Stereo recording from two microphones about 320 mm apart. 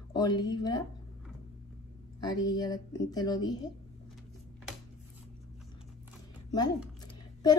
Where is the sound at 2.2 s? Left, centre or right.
Centre.